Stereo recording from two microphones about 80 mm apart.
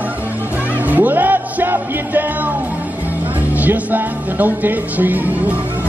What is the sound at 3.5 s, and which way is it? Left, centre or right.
Music, centre.